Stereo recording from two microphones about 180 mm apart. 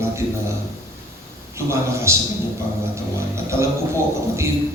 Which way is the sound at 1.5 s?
15° right (ahead or behind).